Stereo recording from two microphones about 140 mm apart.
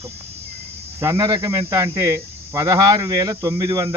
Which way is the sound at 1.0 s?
20° right (ahead or behind).